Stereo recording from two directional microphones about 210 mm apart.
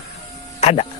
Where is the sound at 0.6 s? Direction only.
30° left (ahead or behind).